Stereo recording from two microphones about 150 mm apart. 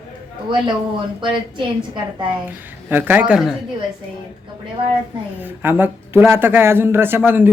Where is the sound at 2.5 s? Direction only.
10° right (ahead or behind).